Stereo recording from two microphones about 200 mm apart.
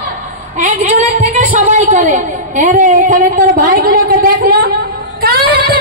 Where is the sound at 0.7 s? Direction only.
40° right (ahead or behind).